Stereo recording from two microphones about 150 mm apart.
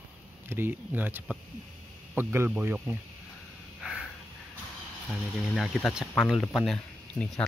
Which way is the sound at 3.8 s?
5° right (ahead or behind).